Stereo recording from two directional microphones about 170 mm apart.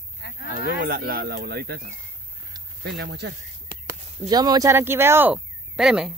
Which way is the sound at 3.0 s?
90° right.